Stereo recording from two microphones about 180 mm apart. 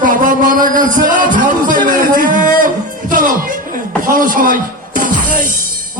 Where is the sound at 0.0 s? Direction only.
50° right (ahead or behind).